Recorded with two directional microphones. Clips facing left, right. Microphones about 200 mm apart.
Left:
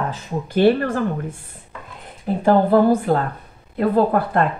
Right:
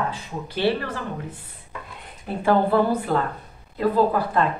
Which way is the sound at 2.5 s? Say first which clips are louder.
Left 5 dB; 45° left (ahead or behind).